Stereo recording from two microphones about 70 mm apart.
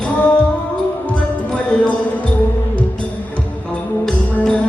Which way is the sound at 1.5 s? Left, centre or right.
Centre.